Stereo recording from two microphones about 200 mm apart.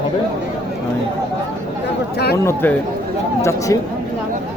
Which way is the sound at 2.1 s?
55° left (ahead or behind).